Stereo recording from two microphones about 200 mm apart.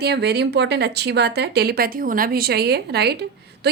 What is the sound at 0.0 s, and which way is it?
A woman's voice, 55° right (ahead or behind).